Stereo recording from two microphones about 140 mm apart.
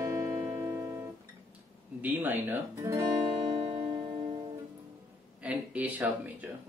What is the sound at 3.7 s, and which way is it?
Music, 40° right (ahead or behind).